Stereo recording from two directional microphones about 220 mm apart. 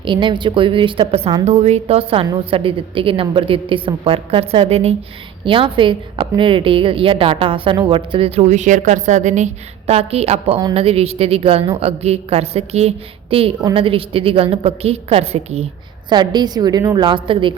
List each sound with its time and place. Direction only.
0.0 s a woman's voice: 20° right (ahead or behind)